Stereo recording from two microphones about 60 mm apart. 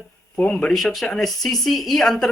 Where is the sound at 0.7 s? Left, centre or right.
Centre.